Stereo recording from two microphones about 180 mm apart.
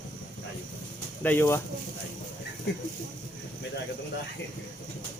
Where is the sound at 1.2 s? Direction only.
15° left (ahead or behind).